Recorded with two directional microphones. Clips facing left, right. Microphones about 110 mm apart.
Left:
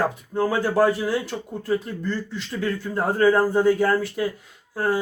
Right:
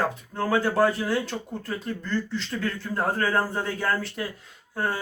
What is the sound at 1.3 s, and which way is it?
Speech, centre (ahead or behind).